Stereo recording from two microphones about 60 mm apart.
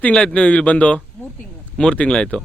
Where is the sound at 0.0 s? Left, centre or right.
Centre.